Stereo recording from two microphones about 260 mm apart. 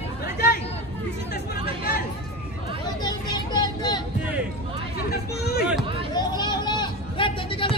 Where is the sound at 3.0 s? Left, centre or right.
Centre.